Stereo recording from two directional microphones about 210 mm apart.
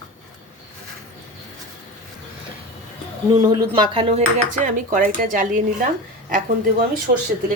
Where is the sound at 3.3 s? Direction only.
20° right (ahead or behind).